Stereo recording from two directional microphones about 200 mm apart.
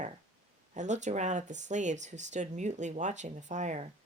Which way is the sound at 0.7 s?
35° right (ahead or behind).